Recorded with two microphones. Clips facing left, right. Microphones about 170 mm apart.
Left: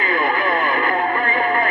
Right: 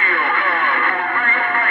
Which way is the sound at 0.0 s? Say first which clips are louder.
Left 2 dB; 40° left (ahead or behind).